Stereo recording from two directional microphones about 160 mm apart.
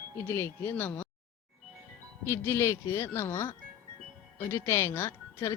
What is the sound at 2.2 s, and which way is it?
Speech, 15° left (ahead or behind).